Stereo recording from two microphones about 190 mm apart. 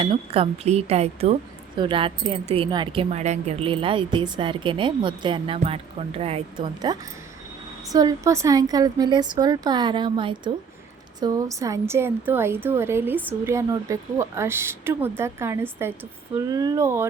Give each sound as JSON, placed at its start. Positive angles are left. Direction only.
{"t": 0.0, "sound": "a woman's voice", "side_deg": -30}